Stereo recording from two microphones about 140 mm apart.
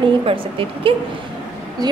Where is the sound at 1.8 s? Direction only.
30° right (ahead or behind).